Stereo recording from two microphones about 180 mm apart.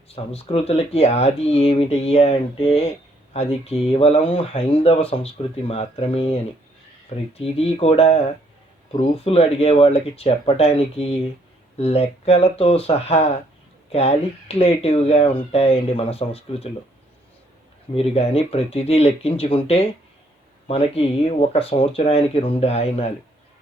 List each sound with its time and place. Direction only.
0.1 s speech: 35° left (ahead or behind)
17.9 s speech: 35° left (ahead or behind)